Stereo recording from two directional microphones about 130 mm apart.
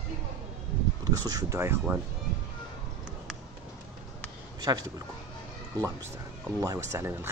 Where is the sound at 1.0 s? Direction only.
30° right (ahead or behind).